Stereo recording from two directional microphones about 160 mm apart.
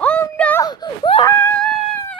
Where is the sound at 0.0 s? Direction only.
10° left (ahead or behind).